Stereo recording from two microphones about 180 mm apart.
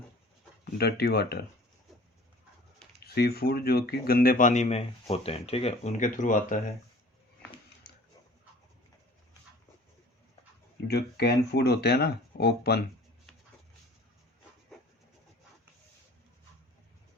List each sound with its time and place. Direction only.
0.6 s speech: 65° left (ahead or behind)
3.0 s speech: 60° left (ahead or behind); by 6.6 s 45° left (ahead or behind)
10.8 s speech: 65° left (ahead or behind)